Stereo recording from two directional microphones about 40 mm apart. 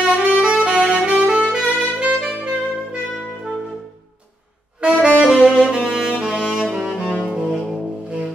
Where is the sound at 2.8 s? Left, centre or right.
Right.